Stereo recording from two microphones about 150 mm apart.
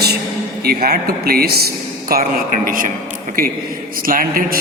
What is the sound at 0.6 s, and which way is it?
A man's voice, 90° right.